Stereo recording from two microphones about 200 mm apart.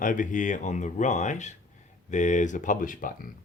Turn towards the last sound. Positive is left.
turn(degrees=45)  # may be behind; listen again after turning